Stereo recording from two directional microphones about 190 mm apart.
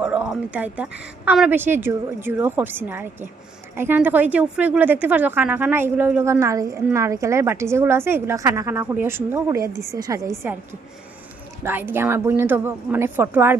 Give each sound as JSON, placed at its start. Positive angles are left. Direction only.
{"t": 0.0, "sound": "a woman's voice", "side_deg": -5}
{"t": 11.6, "sound": "a woman's voice", "side_deg": -10}